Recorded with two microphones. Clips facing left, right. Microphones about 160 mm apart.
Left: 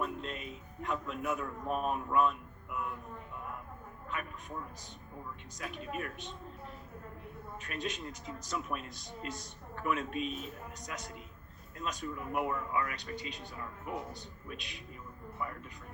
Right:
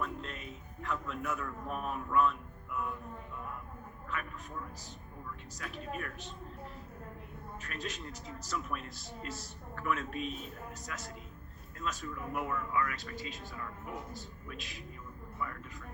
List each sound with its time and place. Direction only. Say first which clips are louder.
0.0 s a man's voice: left 2 dB; 20° left (ahead or behind)
5.5 s a man's voice: left 2 dB; 20° left (ahead or behind)
7.6 s a man's voice: left 3 dB; 20° left (ahead or behind)
14.4 s a man's voice: left 4 dB; 20° left (ahead or behind)